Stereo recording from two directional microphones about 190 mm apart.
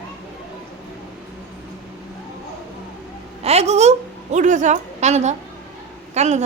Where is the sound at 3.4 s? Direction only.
35° right (ahead or behind).